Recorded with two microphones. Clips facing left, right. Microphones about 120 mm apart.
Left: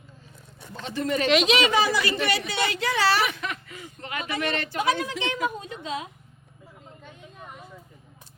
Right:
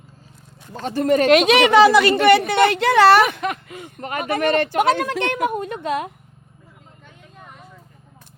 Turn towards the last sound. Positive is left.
turn(degrees=0)  # may be behind; listen again after turning